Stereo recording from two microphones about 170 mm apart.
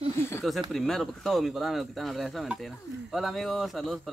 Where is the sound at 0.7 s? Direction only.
Centre (ahead or behind).